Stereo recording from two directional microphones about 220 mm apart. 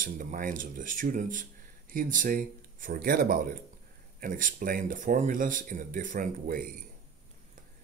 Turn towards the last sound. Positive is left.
turn(degrees=-40)  # may be behind; listen again after turning